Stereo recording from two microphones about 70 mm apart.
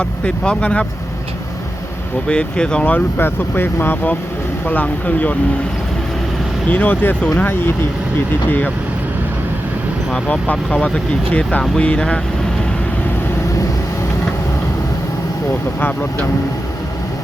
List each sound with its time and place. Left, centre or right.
0.0 s speech: centre
2.2 s speech: centre
3.2 s speech: left
6.7 s speech: left
10.2 s speech: centre